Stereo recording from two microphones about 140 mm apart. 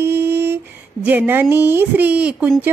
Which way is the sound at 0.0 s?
15° right (ahead or behind).